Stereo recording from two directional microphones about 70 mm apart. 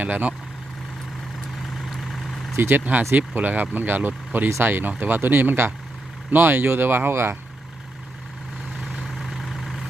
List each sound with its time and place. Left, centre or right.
0.0 s speech: right
1.9 s vehicle: centre
2.6 s speech: right
9.0 s vehicle: centre